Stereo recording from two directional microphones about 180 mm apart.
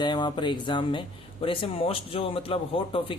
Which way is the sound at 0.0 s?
25° left (ahead or behind).